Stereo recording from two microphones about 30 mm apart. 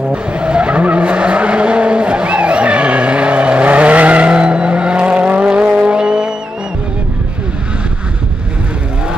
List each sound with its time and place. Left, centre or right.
0.1 s vehicle: right
4.3 s vehicle: right